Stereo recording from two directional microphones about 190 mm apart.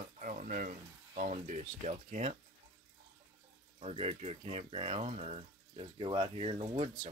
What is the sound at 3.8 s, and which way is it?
Speech, 30° right (ahead or behind).